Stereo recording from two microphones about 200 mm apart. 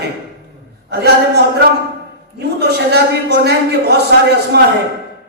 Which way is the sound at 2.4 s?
55° right (ahead or behind).